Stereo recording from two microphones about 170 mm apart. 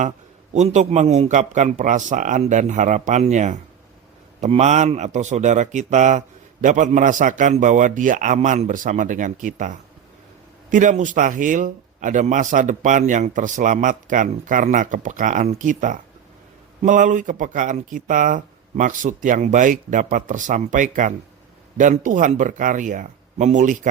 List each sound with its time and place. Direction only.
0.5 s speech: 45° right (ahead or behind)